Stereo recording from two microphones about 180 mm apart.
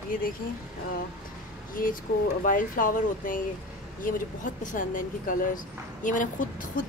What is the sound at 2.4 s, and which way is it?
Speech, 50° left (ahead or behind).